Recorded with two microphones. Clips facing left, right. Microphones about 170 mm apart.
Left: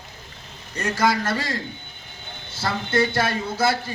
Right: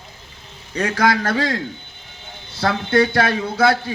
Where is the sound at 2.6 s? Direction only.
60° right (ahead or behind).